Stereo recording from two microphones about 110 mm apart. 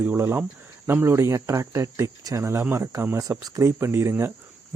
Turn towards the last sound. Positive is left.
turn(degrees=-20)  # may be behind; listen again after turning